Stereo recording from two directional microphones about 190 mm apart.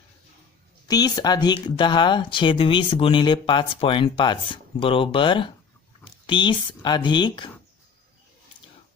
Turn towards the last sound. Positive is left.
turn(degrees=25)  # may be behind; listen again after turning